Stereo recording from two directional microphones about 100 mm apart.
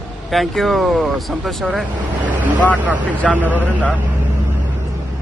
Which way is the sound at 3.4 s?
15° right (ahead or behind).